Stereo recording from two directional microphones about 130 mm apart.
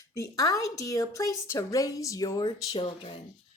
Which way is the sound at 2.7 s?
45° left (ahead or behind).